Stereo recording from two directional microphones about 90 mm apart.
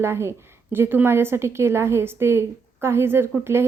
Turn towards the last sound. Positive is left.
turn(degrees=-30)  # may be behind; listen again after turning